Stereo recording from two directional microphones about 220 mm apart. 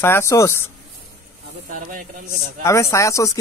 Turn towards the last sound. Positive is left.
turn(degrees=15)  # may be behind; listen again after turning